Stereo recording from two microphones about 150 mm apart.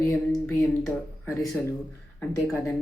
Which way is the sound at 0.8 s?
20° left (ahead or behind).